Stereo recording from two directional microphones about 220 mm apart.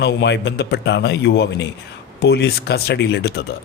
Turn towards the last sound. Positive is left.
turn(degrees=50)  # may be behind; listen again after turning